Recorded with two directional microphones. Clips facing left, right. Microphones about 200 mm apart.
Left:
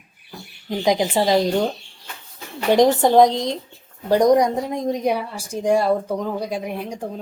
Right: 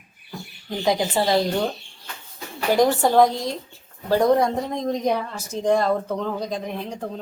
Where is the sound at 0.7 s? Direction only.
20° left (ahead or behind).